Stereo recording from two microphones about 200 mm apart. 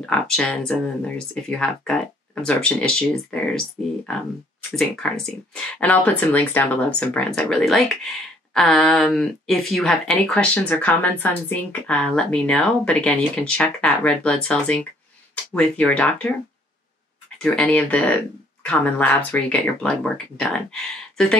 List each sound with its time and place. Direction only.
0.0 s speech: 5° left (ahead or behind)
17.4 s speech: 5° left (ahead or behind)